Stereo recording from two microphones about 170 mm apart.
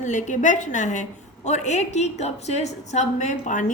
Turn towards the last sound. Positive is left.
turn(degrees=45)  # may be behind; listen again after turning